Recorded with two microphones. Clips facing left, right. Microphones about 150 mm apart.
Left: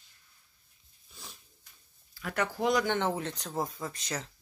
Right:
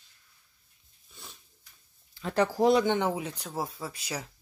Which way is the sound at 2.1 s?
30° right (ahead or behind).